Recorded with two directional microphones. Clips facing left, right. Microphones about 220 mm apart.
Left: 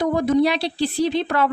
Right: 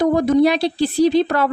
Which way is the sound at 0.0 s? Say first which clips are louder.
Right 4 dB; 45° right (ahead or behind).